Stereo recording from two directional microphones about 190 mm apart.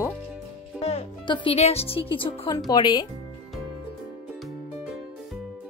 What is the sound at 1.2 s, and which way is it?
Speech, 25° left (ahead or behind).